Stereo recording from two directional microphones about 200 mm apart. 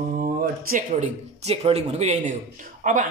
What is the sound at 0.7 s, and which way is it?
Speech, 35° right (ahead or behind).